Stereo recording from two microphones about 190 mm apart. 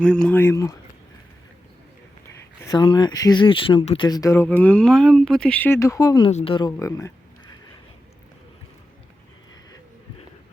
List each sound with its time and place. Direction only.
0.0 s speech: 5° left (ahead or behind)
2.6 s speech: 25° left (ahead or behind)